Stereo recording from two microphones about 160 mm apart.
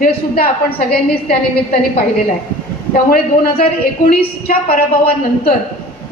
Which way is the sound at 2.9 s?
65° left (ahead or behind).